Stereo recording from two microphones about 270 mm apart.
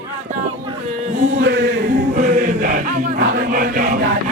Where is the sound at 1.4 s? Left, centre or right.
Right.